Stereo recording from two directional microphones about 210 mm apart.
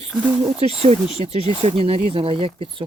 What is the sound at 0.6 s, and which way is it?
Speech, 30° right (ahead or behind).